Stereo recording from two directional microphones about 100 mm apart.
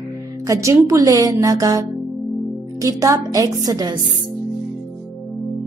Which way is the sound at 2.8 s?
35° right (ahead or behind).